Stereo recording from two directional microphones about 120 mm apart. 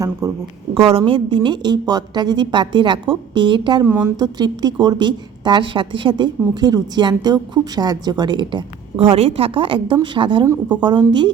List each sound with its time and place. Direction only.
0.2 s speech: 30° right (ahead or behind)
0.9 s a woman's voice: 50° right (ahead or behind)
3.8 s a woman's voice: 15° right (ahead or behind)
4.2 s a woman's voice: 35° right (ahead or behind)